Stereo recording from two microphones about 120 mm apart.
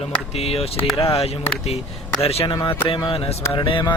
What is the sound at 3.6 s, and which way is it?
Speech, 40° left (ahead or behind).